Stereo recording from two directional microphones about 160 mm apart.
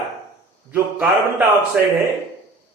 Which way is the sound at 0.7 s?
15° right (ahead or behind).